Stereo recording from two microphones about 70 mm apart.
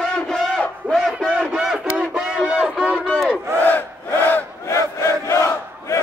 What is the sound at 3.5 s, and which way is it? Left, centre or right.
Battle cry, left.